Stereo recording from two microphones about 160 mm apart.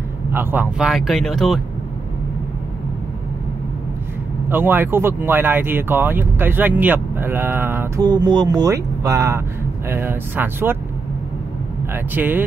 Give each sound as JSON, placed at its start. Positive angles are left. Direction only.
{"t": 0.3, "sound": "speech", "side_deg": -15}
{"t": 4.5, "sound": "speech", "side_deg": -10}
{"t": 11.9, "sound": "speech", "side_deg": -10}